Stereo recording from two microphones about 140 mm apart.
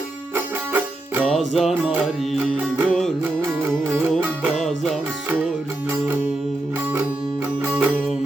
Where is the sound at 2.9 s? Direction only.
5° left (ahead or behind).